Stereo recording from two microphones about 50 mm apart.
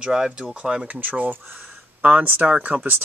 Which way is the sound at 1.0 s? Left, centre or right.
Right.